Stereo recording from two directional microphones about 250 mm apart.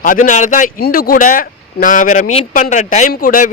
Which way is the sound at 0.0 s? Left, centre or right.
Left.